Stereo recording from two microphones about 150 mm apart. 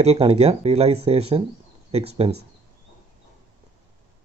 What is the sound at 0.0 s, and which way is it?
Speech, 40° right (ahead or behind).